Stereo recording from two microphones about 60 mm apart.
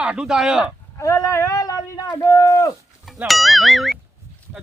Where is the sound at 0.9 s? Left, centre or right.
Left.